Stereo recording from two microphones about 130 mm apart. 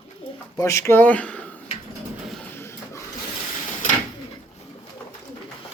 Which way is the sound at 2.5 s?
20° left (ahead or behind).